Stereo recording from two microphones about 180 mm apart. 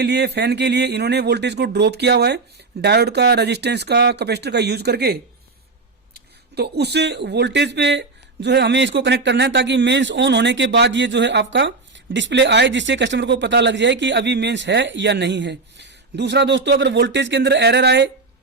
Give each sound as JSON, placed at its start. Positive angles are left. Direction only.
{"t": 0.0, "sound": "speech", "side_deg": -65}
{"t": 6.1, "sound": "speech", "side_deg": -65}